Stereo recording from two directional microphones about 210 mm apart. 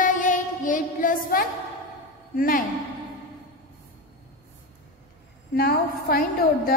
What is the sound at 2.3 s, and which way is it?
Speech, 40° left (ahead or behind).